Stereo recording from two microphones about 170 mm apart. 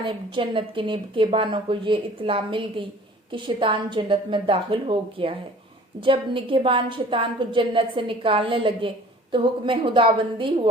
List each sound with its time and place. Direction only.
0.0 s a woman's voice: 30° right (ahead or behind)